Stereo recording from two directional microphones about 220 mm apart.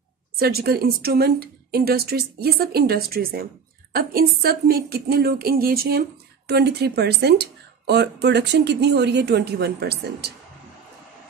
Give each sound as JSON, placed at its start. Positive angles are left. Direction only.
{"t": 0.4, "sound": "a woman's voice", "side_deg": -45}